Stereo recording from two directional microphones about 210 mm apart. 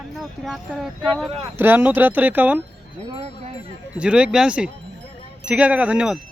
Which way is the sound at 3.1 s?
30° right (ahead or behind).